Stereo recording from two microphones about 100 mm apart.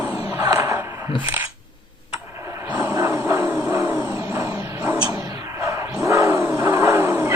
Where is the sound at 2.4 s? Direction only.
30° right (ahead or behind).